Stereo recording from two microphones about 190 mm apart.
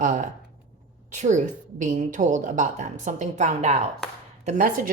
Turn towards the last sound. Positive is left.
turn(degrees=-45)  # may be behind; listen again after turning